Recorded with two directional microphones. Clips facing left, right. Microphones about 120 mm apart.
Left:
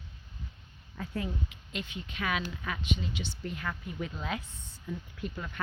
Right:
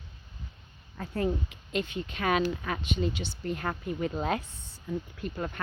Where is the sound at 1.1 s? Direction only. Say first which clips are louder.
Right 7 dB; 45° right (ahead or behind).